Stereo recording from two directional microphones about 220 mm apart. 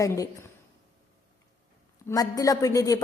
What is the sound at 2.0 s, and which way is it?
Speech, 15° left (ahead or behind).